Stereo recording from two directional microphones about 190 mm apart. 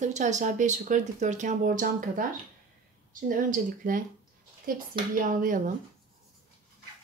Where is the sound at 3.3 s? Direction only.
45° right (ahead or behind).